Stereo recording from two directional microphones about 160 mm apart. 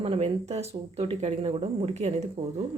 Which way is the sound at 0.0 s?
35° right (ahead or behind).